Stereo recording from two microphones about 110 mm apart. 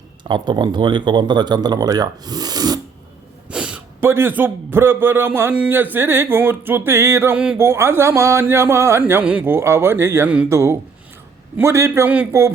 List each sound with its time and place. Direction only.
0.3 s speech: 45° right (ahead or behind)
3.5 s a sound: 10° right (ahead or behind)
4.0 s a man's voice: 20° right (ahead or behind)
7.3 s speech: 10° right (ahead or behind)
7.6 s a man's voice: 25° right (ahead or behind)
12.0 s speech: 10° right (ahead or behind)
12.3 s a man's voice: 25° right (ahead or behind)